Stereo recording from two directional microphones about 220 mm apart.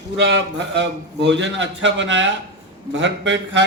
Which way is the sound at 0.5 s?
50° right (ahead or behind).